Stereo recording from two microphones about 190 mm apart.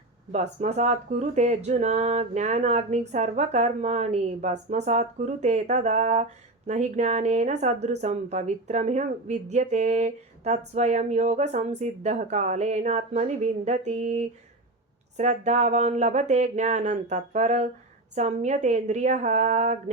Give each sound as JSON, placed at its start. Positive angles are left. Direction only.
{"t": 0.3, "sound": "speech", "side_deg": -35}